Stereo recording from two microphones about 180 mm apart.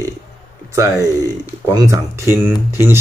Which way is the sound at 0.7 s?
20° right (ahead or behind).